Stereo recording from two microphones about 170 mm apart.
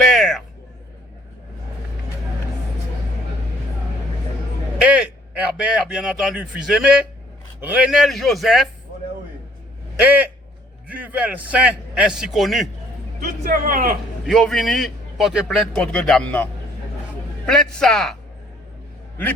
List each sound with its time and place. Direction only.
0.0 s a sound: centre (ahead or behind)
4.8 s a man's voice: 5° right (ahead or behind)
10.8 s a man's voice: 10° right (ahead or behind)
13.2 s speech: 55° right (ahead or behind)
14.3 s a man's voice: centre (ahead or behind)